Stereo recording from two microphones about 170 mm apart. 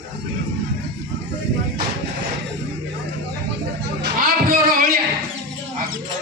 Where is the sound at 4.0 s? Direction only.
60° right (ahead or behind).